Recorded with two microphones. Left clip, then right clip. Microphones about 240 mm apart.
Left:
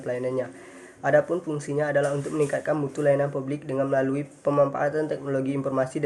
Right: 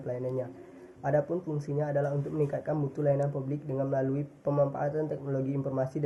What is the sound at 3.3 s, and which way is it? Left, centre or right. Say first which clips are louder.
Speech: left 6 dB; left.